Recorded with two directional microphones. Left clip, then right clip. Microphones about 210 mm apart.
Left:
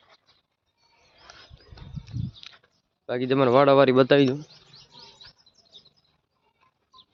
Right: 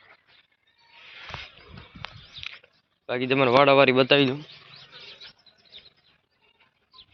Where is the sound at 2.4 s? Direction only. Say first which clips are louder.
Right 8 dB; 30° left (ahead or behind).